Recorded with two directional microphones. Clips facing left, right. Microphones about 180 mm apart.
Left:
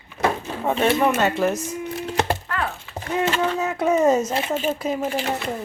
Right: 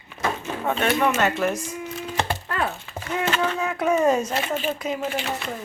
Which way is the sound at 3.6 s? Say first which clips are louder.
Left 2 dB; 25° left (ahead or behind).